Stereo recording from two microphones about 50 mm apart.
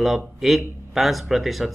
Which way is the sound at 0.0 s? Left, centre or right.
Centre.